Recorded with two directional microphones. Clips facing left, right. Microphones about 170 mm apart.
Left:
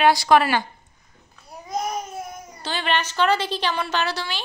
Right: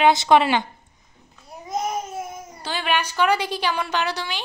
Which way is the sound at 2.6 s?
10° right (ahead or behind).